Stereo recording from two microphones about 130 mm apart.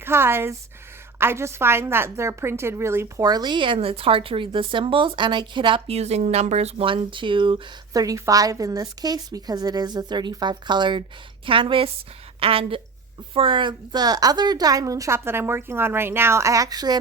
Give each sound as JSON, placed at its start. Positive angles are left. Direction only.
{"t": 0.0, "sound": "a woman's voice", "side_deg": -20}
{"t": 3.2, "sound": "a woman's voice", "side_deg": -30}
{"t": 7.9, "sound": "a woman's voice", "side_deg": -25}